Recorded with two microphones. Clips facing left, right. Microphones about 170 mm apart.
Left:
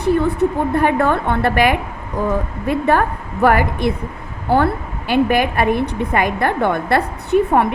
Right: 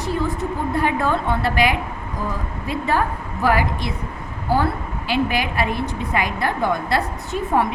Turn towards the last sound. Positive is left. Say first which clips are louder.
# left 6 dB
turn(degrees=60)  # may be behind; listen again after turning